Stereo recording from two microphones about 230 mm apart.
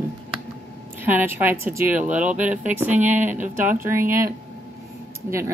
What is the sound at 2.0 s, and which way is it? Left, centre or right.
Speech, right.